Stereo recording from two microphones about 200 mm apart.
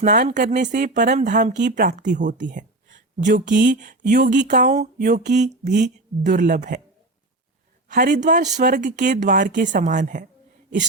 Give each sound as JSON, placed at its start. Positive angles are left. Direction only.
{"t": 0.0, "sound": "speech", "side_deg": -40}
{"t": 0.4, "sound": "speech", "side_deg": -55}
{"t": 0.7, "sound": "speech", "side_deg": -45}
{"t": 2.5, "sound": "a sound", "side_deg": -40}
{"t": 3.7, "sound": "speech", "side_deg": -40}
{"t": 7.9, "sound": "speech", "side_deg": -45}
{"t": 9.0, "sound": "speech", "side_deg": -55}
{"t": 9.4, "sound": "speech", "side_deg": -40}